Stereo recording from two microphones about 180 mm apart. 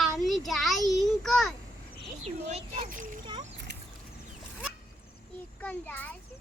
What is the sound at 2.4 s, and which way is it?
Speech, 35° right (ahead or behind).